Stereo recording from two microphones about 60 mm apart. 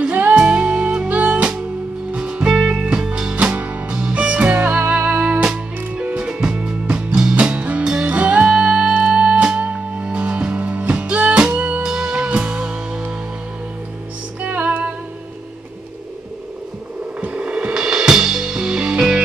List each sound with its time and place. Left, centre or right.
0.1 s music: right
7.8 s music: centre
8.1 s music: right
11.8 s music: centre
14.4 s music: right
17.2 s music: right